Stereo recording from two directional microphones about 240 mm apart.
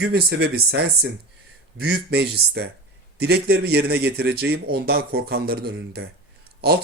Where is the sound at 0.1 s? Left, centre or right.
Right.